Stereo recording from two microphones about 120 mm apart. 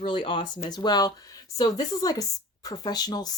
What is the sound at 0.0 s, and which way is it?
A woman's voice, 40° left (ahead or behind).